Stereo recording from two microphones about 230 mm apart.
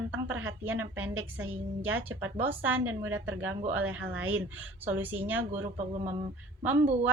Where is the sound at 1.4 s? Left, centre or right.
Right.